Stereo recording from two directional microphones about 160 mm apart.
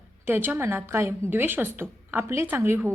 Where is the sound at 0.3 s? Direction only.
10° right (ahead or behind).